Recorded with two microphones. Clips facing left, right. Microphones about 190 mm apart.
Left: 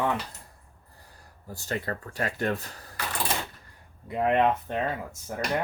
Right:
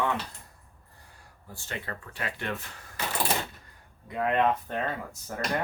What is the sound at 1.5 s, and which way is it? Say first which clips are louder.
Speech: left 6 dB; 40° left (ahead or behind).